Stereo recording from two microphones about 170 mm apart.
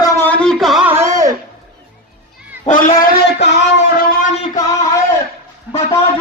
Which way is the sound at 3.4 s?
90° left.